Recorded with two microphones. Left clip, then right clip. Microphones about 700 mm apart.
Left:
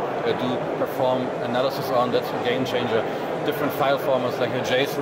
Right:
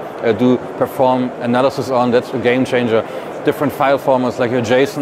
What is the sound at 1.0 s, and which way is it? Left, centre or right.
Speech, right.